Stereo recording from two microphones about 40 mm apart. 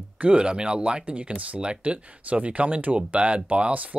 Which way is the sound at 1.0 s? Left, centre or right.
Right.